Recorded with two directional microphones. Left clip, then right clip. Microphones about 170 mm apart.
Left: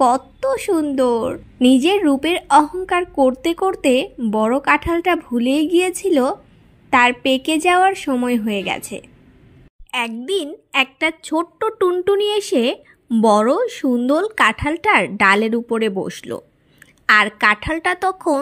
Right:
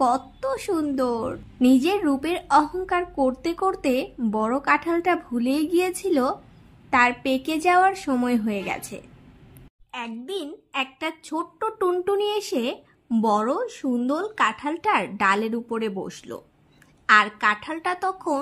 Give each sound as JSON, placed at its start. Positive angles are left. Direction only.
{"t": 0.0, "sound": "a woman's voice", "side_deg": 20}
{"t": 9.8, "sound": "a woman's voice", "side_deg": 30}